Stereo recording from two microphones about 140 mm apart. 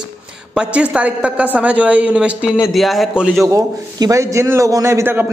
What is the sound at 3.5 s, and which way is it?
A man's voice, 20° right (ahead or behind).